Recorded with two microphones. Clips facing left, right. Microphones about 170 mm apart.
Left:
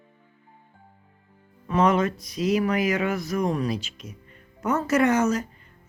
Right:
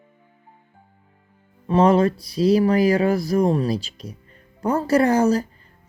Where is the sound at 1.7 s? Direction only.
30° right (ahead or behind).